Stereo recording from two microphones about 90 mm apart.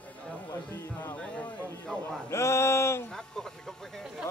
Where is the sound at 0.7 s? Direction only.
20° left (ahead or behind).